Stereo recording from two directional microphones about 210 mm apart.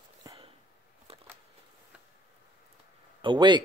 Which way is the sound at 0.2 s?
20° right (ahead or behind).